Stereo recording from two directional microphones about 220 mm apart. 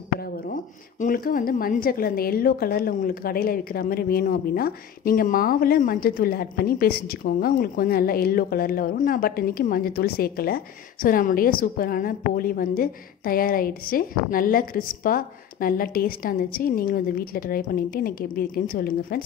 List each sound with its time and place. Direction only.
0.5 s a woman's voice: 40° left (ahead or behind)